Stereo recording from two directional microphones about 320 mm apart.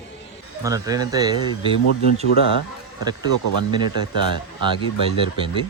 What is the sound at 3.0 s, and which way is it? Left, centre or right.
Speech, centre.